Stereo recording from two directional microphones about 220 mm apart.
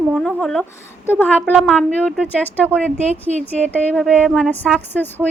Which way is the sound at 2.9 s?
30° right (ahead or behind).